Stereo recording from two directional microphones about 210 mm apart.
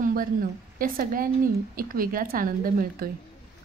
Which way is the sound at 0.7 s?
40° right (ahead or behind).